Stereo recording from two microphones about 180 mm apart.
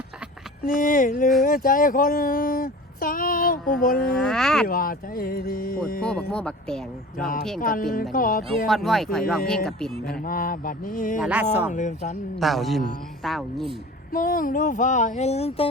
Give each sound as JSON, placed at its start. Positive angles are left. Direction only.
{"t": 0.6, "sound": "speech", "side_deg": 45}
{"t": 4.0, "sound": "speech", "side_deg": 5}
{"t": 4.6, "sound": "speech", "side_deg": 50}
{"t": 6.0, "sound": "speech", "side_deg": 5}
{"t": 7.6, "sound": "speech", "side_deg": 50}
{"t": 8.6, "sound": "speech", "side_deg": 0}
{"t": 10.2, "sound": "speech", "side_deg": 50}
{"t": 11.2, "sound": "speech", "side_deg": -10}
{"t": 11.7, "sound": "a sound", "side_deg": 40}
{"t": 12.4, "sound": "speech", "side_deg": 0}
{"t": 14.1, "sound": "speech", "side_deg": 50}